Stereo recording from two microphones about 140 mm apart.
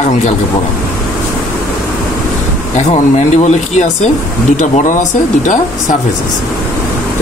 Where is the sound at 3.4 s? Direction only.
55° left (ahead or behind).